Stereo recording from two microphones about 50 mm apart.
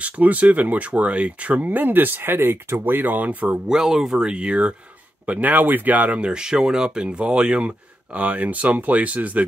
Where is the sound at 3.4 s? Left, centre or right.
Centre.